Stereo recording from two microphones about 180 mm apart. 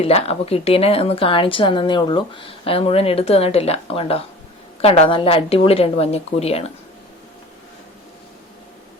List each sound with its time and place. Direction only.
0.0 s a woman's voice: 35° left (ahead or behind)